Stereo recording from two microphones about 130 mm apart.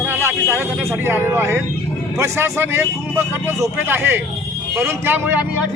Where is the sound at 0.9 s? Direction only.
15° right (ahead or behind).